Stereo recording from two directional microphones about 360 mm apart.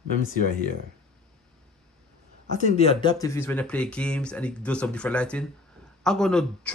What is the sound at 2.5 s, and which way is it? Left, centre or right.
Speech, centre.